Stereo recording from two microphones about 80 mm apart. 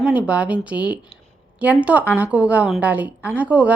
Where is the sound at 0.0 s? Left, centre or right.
Centre.